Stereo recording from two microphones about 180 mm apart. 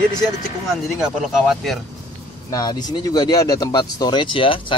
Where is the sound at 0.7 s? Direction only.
Centre (ahead or behind).